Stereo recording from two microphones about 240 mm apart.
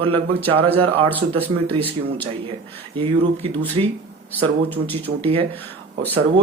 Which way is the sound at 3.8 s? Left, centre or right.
Right.